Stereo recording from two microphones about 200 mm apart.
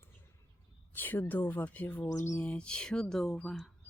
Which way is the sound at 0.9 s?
10° left (ahead or behind).